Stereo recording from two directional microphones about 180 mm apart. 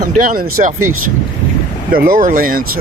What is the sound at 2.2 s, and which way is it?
Speech, 50° right (ahead or behind).